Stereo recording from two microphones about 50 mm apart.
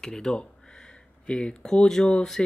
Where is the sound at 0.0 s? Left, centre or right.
Centre.